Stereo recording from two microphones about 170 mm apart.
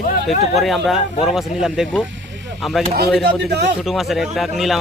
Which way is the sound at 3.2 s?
80° right.